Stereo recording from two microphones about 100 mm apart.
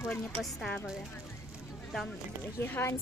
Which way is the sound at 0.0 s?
Centre (ahead or behind).